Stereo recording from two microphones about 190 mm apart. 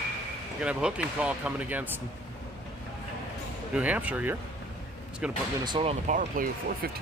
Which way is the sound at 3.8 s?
10° right (ahead or behind).